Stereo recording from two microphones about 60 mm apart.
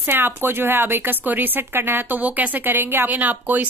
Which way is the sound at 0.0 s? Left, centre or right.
Right.